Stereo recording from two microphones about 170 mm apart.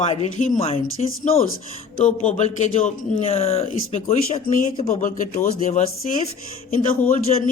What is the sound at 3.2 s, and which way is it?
A woman's voice, 35° left (ahead or behind).